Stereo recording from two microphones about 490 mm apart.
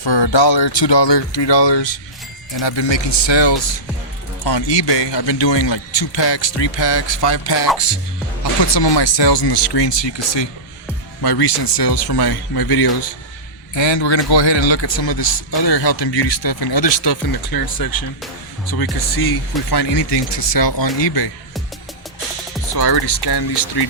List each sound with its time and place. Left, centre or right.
0.0 s speech: left
13.7 s speech: left
22.7 s speech: left